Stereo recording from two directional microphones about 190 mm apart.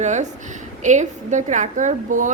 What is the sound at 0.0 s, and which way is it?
A woman's voice, 40° right (ahead or behind).